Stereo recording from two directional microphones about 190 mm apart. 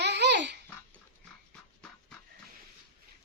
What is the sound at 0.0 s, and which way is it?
Babbling, 65° right (ahead or behind).